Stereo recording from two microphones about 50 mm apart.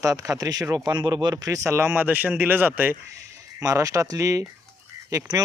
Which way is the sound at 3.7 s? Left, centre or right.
Right.